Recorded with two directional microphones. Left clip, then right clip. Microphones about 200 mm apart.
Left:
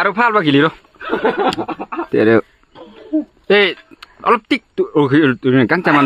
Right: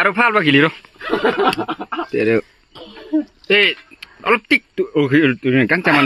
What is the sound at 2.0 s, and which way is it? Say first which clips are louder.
Speech: left 5 dB; 25° left (ahead or behind).